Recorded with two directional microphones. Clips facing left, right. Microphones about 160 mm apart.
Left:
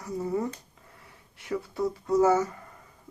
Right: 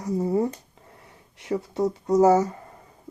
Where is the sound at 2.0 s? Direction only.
30° right (ahead or behind).